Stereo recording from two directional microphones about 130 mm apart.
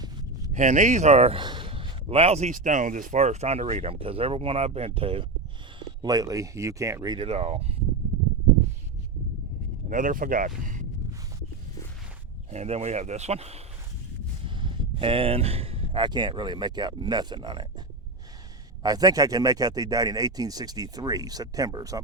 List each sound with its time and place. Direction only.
0.5 s speech: 70° right (ahead or behind); by 1.4 s 55° right (ahead or behind)
1.4 s speech: 40° right (ahead or behind)
6.0 s speech: 30° right (ahead or behind)
7.3 s speech: 55° right (ahead or behind)
9.9 s speech: 90° right
12.5 s speech: 55° right (ahead or behind)
14.4 s speech: 40° right (ahead or behind)
18.8 s speech: 30° right (ahead or behind)